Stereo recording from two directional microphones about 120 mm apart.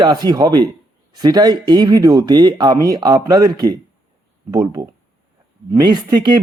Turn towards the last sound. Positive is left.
turn(degrees=-35)  # may be behind; listen again after turning